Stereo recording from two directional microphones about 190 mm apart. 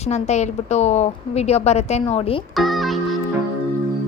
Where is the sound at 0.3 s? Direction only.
35° left (ahead or behind).